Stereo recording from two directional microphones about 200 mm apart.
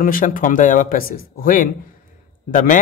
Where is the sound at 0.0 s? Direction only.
40° left (ahead or behind).